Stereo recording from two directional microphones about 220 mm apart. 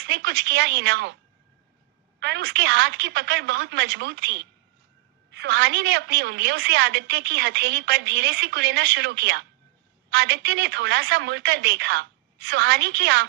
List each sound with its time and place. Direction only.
0.0 s a woman's voice: 50° right (ahead or behind)